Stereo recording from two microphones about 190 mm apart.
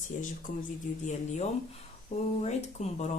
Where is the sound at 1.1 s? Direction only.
35° left (ahead or behind).